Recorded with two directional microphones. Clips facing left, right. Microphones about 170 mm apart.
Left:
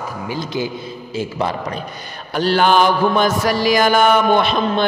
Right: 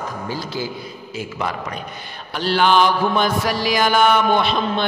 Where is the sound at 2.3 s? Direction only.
45° left (ahead or behind).